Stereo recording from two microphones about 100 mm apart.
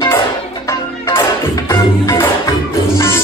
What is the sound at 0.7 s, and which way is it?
Music, 30° left (ahead or behind).